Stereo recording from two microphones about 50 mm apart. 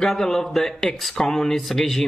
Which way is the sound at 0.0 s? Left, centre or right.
Centre.